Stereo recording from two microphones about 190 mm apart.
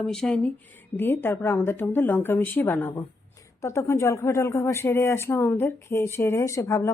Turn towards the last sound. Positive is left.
turn(degrees=15)  # may be behind; listen again after turning